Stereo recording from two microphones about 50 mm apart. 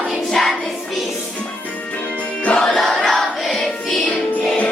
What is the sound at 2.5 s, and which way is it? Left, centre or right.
Music, centre.